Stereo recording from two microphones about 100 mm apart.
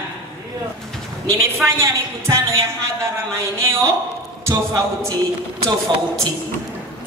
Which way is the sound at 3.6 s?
30° right (ahead or behind).